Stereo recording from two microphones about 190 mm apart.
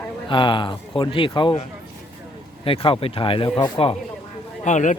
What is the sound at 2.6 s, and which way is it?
A man's voice, 30° left (ahead or behind).